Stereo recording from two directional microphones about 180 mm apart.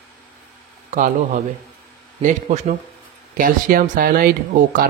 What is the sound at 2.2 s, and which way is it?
Speech, 40° right (ahead or behind).